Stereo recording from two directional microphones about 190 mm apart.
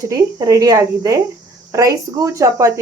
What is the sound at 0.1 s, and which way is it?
Speech, 15° right (ahead or behind).